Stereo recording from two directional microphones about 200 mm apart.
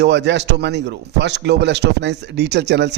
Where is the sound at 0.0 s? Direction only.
60° right (ahead or behind).